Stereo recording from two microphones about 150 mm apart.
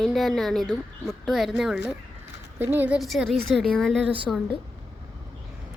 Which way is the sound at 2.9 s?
Centre (ahead or behind).